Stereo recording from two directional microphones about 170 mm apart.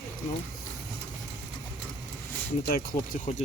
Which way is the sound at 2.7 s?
60° left (ahead or behind).